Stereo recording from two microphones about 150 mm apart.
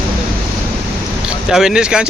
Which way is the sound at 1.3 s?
5° right (ahead or behind).